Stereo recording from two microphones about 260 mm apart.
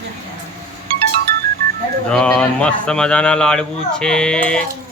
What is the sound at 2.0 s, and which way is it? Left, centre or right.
Speech, centre.